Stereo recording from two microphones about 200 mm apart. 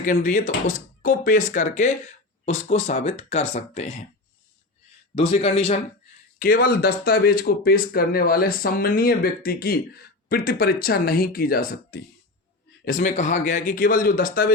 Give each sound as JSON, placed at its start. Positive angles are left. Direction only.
{"t": 0.0, "sound": "speech", "side_deg": 40}
{"t": 5.1, "sound": "speech", "side_deg": 30}
{"t": 6.4, "sound": "speech", "side_deg": 50}